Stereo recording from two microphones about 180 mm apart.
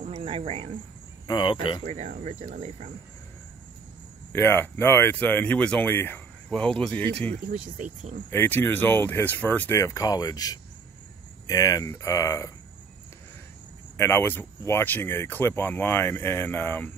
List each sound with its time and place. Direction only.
0.0 s speech: 30° right (ahead or behind)
1.2 s speech: 25° left (ahead or behind)
1.8 s speech: 40° right (ahead or behind)
4.3 s speech: 15° left (ahead or behind)
7.4 s speech: 50° right (ahead or behind)
8.3 s speech: 10° left (ahead or behind)
13.9 s speech: 15° left (ahead or behind)